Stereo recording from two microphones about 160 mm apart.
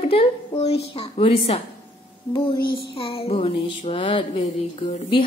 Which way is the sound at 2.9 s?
35° left (ahead or behind).